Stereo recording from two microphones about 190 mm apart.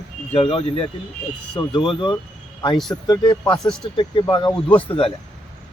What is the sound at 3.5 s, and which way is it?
Speech, 5° left (ahead or behind).